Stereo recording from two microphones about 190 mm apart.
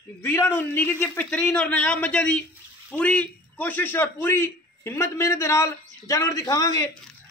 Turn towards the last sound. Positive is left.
turn(degrees=20)  # may be behind; listen again after turning